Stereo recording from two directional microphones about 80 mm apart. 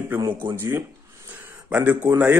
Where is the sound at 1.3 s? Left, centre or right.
Right.